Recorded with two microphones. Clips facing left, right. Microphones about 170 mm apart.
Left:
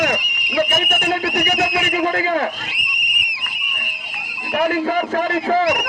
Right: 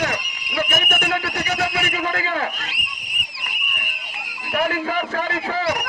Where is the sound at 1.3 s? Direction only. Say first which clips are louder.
Left 4 dB; 20° left (ahead or behind).